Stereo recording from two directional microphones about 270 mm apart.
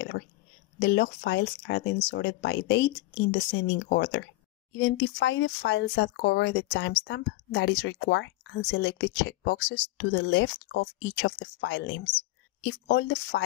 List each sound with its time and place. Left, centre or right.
0.7 s speech: left